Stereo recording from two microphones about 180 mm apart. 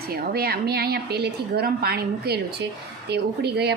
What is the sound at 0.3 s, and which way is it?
A woman's voice, 60° right (ahead or behind).